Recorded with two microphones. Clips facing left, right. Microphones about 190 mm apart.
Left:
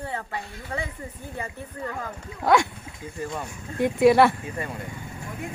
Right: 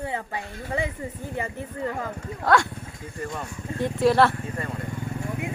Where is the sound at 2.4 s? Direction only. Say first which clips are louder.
Left 1 dB; 15° left (ahead or behind).